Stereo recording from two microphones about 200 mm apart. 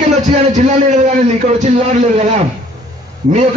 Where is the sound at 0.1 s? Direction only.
35° right (ahead or behind).